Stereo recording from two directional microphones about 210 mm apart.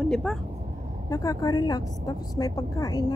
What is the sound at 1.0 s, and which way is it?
A woman's voice, 15° left (ahead or behind).